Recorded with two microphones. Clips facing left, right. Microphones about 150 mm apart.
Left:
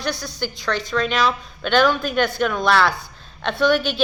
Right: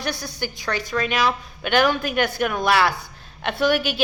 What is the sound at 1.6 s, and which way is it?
A woman's voice, 15° right (ahead or behind).